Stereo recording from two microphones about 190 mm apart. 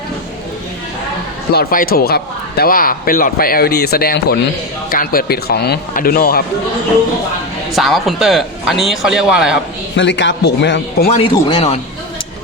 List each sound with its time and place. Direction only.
1.5 s speech: 50° left (ahead or behind)
7.8 s a man's voice: centre (ahead or behind)
9.9 s speech: 70° left (ahead or behind)
11.1 s speech: 30° left (ahead or behind)